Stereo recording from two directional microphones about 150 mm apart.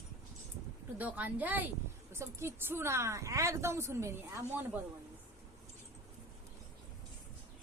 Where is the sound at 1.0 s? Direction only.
10° right (ahead or behind).